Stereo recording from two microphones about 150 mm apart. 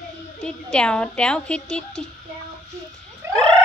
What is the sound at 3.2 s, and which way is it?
Frog, 20° right (ahead or behind).